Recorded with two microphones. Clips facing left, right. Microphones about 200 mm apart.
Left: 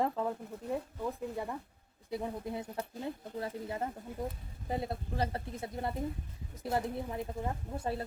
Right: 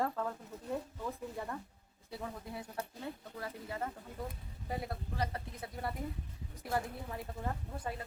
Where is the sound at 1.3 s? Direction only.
15° left (ahead or behind).